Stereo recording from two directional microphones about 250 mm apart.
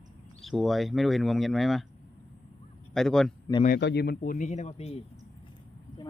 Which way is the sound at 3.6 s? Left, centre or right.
Left.